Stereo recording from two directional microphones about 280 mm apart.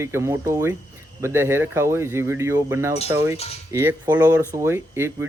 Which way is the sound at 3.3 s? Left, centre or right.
Left.